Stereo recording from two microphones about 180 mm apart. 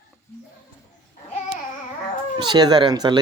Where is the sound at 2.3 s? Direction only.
25° right (ahead or behind).